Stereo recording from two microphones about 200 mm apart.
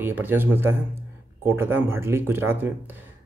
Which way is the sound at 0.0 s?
10° right (ahead or behind).